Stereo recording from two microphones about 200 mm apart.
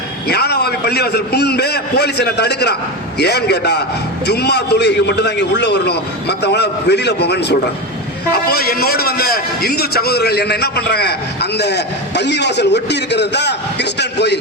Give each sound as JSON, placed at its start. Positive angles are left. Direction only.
{"t": 0.3, "sound": "a man's voice", "side_deg": 55}